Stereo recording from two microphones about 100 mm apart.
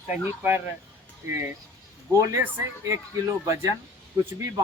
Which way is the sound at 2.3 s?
30° right (ahead or behind).